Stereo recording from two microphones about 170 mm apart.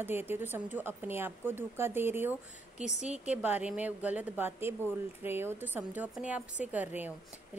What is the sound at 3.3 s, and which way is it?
A woman's voice, 10° right (ahead or behind).